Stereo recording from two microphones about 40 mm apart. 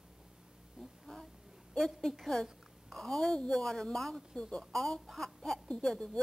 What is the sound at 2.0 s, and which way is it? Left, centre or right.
A woman's voice, centre.